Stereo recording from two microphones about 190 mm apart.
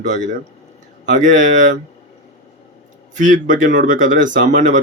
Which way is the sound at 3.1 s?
40° right (ahead or behind).